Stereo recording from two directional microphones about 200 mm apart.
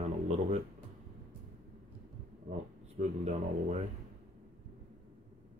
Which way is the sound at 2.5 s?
35° right (ahead or behind).